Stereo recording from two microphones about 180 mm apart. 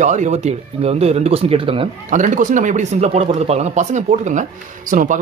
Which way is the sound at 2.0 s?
45° right (ahead or behind).